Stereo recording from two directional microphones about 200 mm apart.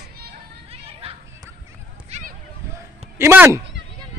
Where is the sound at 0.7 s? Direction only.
30° right (ahead or behind).